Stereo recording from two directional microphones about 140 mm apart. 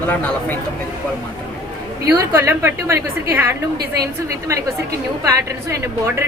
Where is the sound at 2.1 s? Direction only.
15° right (ahead or behind).